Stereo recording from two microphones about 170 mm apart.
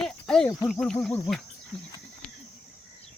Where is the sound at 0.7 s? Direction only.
5° left (ahead or behind).